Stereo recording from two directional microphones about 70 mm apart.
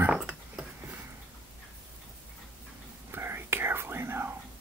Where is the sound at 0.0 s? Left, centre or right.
Centre.